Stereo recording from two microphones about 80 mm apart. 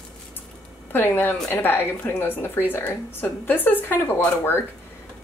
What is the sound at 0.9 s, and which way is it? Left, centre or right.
Speech, left.